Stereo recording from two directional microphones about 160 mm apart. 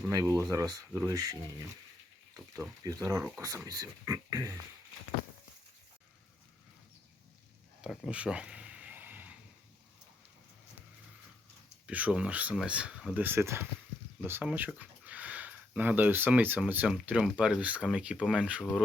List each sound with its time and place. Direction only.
0.1 s speech: 20° right (ahead or behind)
7.8 s a sound: 5° right (ahead or behind)
11.9 s speech: 10° right (ahead or behind)